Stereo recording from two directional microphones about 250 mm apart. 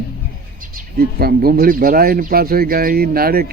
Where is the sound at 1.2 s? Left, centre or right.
Right.